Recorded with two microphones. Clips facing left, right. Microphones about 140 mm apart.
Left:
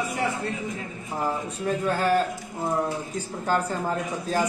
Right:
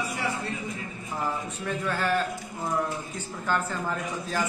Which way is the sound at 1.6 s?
40° left (ahead or behind).